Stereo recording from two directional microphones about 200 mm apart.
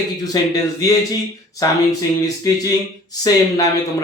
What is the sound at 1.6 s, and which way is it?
Speech, 20° left (ahead or behind).